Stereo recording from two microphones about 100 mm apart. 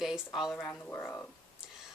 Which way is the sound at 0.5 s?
15° left (ahead or behind).